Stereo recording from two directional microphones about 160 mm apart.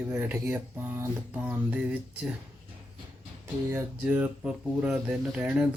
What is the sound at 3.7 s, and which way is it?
Speech, 10° right (ahead or behind).